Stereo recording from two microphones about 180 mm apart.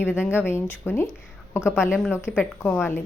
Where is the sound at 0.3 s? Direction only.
15° left (ahead or behind).